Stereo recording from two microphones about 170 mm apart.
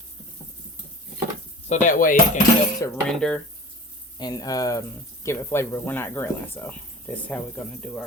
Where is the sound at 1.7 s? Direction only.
50° left (ahead or behind).